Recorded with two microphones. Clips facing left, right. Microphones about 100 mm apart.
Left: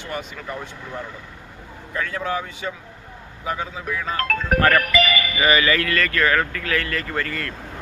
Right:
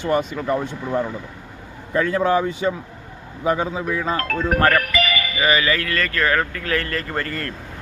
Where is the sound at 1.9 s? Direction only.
35° right (ahead or behind).